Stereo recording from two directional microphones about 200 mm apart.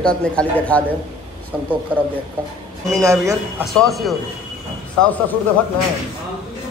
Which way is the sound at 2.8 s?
15° right (ahead or behind).